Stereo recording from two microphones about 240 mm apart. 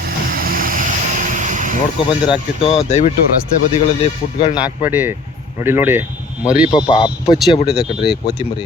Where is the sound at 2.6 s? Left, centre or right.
Left.